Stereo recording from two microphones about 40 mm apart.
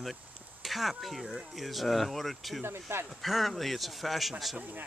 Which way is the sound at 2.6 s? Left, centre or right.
Right.